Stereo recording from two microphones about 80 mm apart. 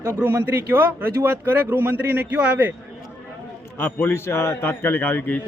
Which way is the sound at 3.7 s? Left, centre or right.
Left.